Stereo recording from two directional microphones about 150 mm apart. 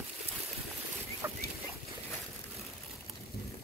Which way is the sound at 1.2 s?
15° right (ahead or behind).